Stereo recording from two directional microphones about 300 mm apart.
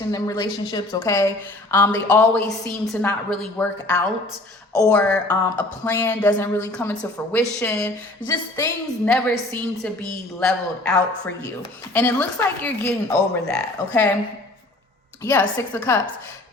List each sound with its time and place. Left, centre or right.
0.1 s speech: centre
15.2 s speech: centre